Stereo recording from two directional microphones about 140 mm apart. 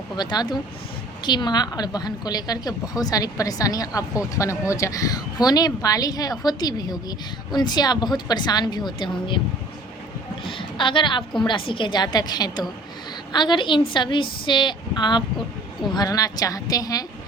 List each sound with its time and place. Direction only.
0.2 s a woman's voice: 30° left (ahead or behind)
10.4 s a sound: 35° left (ahead or behind)
11.4 s a woman's voice: 35° left (ahead or behind)